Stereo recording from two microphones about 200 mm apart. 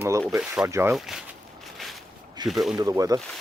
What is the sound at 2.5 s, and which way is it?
Speech, centre (ahead or behind).